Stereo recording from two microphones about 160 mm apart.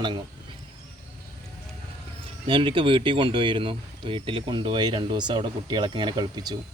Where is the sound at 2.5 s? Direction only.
35° right (ahead or behind).